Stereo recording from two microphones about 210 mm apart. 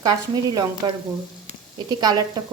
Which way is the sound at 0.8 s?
20° right (ahead or behind).